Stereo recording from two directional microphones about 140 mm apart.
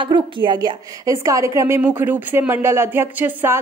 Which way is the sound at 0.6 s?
25° right (ahead or behind).